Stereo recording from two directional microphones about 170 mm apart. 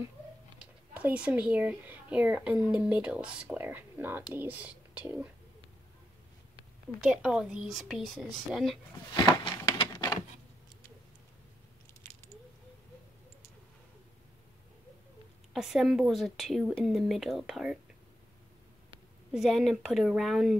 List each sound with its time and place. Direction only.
0.6 s speech: 10° right (ahead or behind)
7.0 s a woman's voice: 5° right (ahead or behind)
9.1 s a sound: 25° left (ahead or behind)
15.5 s a woman's voice: centre (ahead or behind)
19.3 s a woman's voice: centre (ahead or behind)